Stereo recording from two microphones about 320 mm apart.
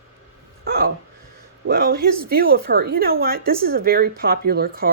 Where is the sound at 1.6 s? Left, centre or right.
Right.